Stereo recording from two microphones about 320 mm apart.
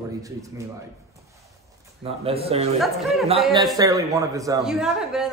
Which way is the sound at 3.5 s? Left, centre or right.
Centre.